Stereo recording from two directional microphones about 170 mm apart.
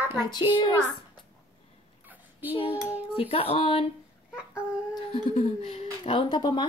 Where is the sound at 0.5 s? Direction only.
25° left (ahead or behind).